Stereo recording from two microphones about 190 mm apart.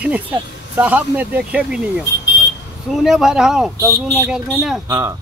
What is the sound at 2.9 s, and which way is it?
Speech, centre (ahead or behind).